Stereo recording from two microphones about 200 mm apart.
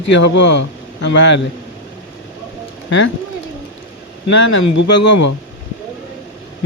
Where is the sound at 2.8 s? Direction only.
65° left (ahead or behind).